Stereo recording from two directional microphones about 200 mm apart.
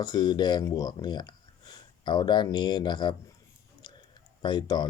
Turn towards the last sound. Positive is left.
turn(degrees=20)  # may be behind; listen again after turning